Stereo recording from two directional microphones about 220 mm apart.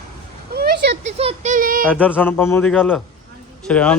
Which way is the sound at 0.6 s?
45° right (ahead or behind).